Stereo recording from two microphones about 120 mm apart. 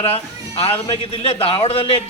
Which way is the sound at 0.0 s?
55° left (ahead or behind).